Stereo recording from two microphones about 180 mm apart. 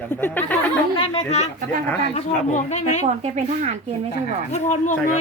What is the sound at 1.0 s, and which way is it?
Speech, 35° left (ahead or behind).